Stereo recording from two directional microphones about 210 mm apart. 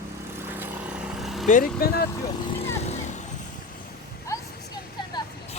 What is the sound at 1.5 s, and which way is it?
Speech, 40° left (ahead or behind).